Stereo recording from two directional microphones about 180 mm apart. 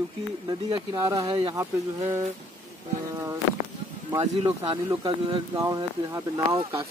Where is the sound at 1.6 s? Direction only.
15° right (ahead or behind).